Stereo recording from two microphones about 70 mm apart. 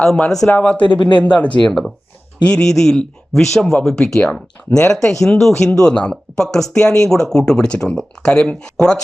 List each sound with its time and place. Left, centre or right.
0.4 s speech: centre
1.6 s speech: centre